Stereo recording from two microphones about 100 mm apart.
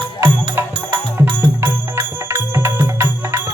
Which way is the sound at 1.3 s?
50° right (ahead or behind).